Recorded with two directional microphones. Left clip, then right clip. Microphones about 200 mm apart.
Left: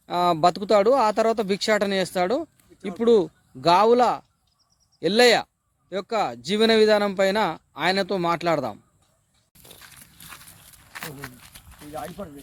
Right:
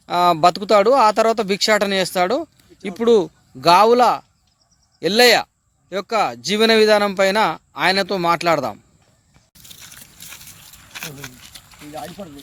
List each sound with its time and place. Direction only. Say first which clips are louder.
0.0 s speech: right 5 dB; 5° left (ahead or behind)
10.9 s a sound: right 4 dB; 25° right (ahead or behind)
11.9 s speech: right 2 dB; 5° right (ahead or behind)